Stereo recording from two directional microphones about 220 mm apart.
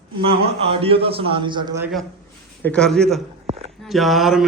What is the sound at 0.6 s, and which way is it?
A man's voice, 25° right (ahead or behind).